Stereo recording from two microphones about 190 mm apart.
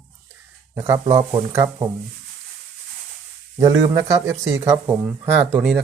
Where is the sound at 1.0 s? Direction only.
30° right (ahead or behind).